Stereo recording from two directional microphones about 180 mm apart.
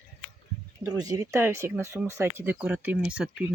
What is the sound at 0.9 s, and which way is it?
Speech, 20° right (ahead or behind).